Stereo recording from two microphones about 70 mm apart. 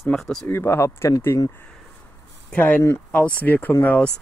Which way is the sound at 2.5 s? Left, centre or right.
Left.